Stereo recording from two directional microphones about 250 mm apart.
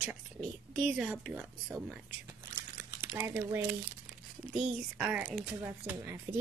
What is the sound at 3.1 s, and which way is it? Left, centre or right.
Speech, centre.